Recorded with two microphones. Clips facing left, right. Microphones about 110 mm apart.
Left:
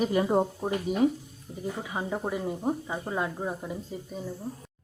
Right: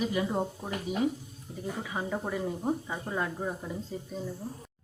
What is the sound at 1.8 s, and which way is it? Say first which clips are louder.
Speech: left 2 dB; 15° left (ahead or behind).